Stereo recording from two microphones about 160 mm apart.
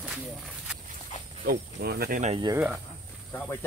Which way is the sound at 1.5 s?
75° right (ahead or behind).